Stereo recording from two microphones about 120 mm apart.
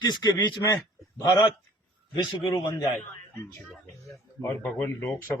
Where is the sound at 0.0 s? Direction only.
35° left (ahead or behind).